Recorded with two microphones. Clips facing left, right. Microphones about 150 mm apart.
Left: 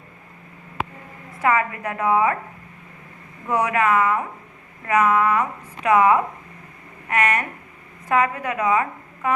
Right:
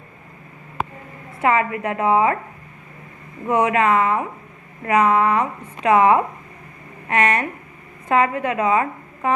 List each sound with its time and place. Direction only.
1.4 s a woman's voice: 25° right (ahead or behind)
3.5 s a woman's voice: 25° right (ahead or behind)